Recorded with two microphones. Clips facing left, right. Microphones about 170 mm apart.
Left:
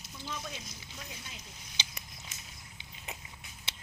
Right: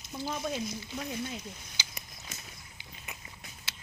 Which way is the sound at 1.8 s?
25° left (ahead or behind).